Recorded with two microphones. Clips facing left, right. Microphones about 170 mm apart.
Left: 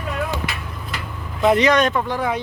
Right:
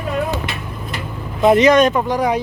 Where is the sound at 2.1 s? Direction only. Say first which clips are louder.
Right 5 dB; 15° right (ahead or behind).